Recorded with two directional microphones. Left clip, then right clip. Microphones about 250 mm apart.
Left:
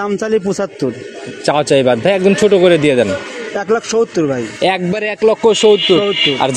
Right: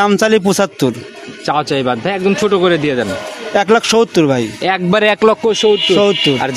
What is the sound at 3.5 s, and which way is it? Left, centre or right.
Speech, right.